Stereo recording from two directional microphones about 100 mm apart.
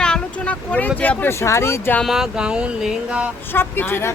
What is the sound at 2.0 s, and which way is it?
Speech, 5° right (ahead or behind).